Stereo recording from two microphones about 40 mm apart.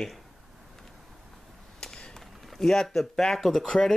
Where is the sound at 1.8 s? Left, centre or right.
Centre.